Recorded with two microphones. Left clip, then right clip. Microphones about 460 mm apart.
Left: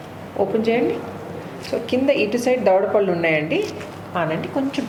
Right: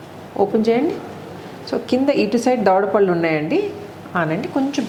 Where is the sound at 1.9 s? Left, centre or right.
Right.